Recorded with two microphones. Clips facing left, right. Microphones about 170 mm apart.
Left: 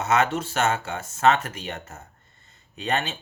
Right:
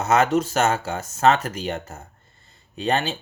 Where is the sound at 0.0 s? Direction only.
40° right (ahead or behind).